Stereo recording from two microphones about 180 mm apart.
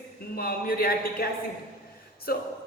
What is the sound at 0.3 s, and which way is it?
Speech, 55° left (ahead or behind).